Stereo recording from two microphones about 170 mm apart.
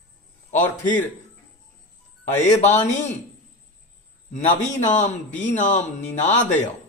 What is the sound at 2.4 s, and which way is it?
Speech, 45° left (ahead or behind).